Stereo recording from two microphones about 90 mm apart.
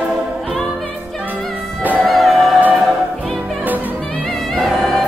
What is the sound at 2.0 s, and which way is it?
Music, centre (ahead or behind).